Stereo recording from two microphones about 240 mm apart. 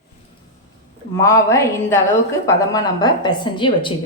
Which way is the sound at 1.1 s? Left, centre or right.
Centre.